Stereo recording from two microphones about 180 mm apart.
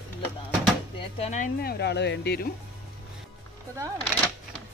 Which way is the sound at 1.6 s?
65° left (ahead or behind).